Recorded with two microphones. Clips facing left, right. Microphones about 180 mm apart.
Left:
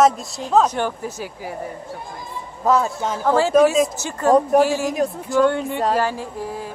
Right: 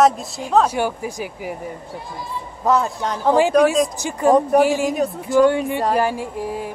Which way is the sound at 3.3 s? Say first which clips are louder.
Even; 15° right (ahead or behind).